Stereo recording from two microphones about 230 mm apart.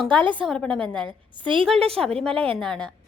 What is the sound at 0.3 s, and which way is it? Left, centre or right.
A woman's voice, centre.